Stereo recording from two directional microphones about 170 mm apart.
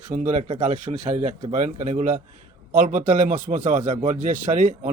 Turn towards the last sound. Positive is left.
turn(degrees=-50)  # may be behind; listen again after turning